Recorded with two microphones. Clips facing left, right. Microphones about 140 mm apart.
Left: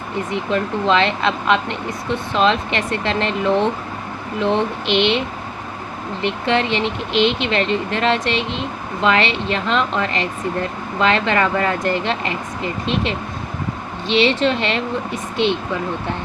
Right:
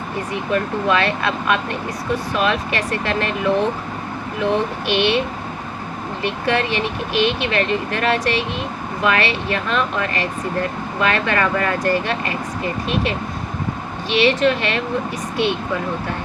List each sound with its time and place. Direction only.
0.3 s speech: 20° left (ahead or behind)
4.9 s speech: 20° left (ahead or behind)
6.2 s speech: 25° left (ahead or behind)